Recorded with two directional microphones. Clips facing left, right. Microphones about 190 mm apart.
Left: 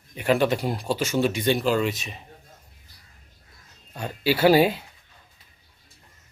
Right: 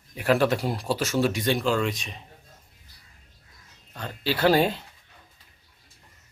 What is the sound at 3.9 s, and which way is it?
Speech, 10° left (ahead or behind).